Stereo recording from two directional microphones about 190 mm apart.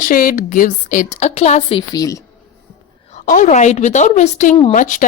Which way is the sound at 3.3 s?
40° left (ahead or behind).